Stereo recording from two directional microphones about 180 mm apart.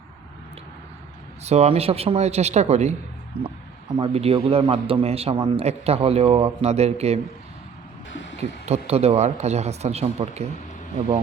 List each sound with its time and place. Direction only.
1.5 s a man's voice: 35° right (ahead or behind)
8.1 s a sound: 90° left
8.4 s a man's voice: 35° right (ahead or behind)